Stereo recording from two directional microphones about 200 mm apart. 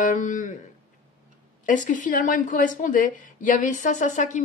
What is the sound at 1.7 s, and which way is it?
A woman's voice, 40° left (ahead or behind).